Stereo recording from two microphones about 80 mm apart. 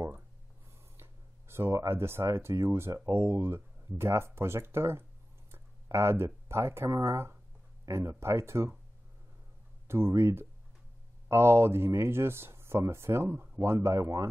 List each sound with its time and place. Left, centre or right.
1.5 s speech: right
9.8 s speech: right